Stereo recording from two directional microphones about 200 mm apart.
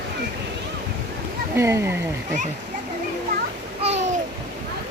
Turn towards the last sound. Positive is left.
turn(degrees=-35)  # may be behind; listen again after turning